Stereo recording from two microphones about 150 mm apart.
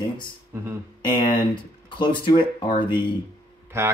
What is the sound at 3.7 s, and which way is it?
Speech, 15° right (ahead or behind).